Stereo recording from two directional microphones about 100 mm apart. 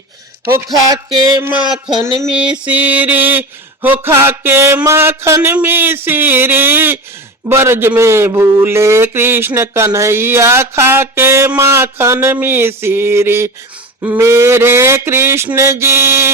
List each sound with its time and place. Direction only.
0.7 s music: 45° right (ahead or behind)
2.3 s a man's voice: 10° right (ahead or behind); by 16.3 s 25° right (ahead or behind)